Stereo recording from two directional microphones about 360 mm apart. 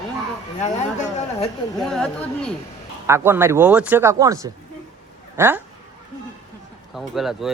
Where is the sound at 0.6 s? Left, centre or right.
Centre.